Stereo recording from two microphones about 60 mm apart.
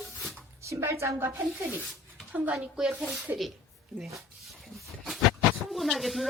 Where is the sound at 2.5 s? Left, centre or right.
Centre.